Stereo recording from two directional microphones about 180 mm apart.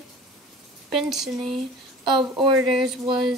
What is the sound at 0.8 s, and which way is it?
Speech, centre (ahead or behind).